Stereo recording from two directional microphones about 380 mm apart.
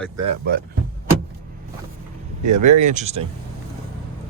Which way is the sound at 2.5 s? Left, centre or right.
Right.